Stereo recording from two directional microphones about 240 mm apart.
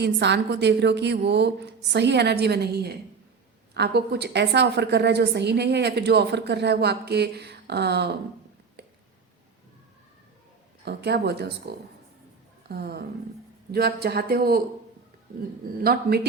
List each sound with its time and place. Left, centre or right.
0.0 s a woman's voice: right
10.8 s speech: right
12.6 s speech: right
15.8 s speech: right